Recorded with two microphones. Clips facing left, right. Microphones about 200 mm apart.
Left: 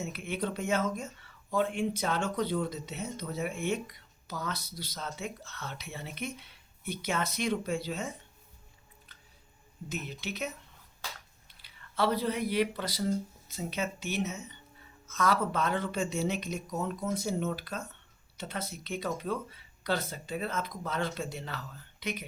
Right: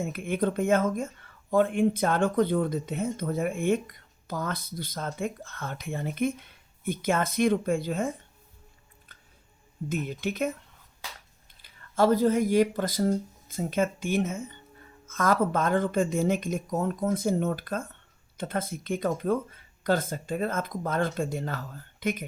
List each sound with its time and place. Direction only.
0.0 s speech: 50° right (ahead or behind)
9.9 s speech: 50° right (ahead or behind)
11.6 s speech: 45° right (ahead or behind)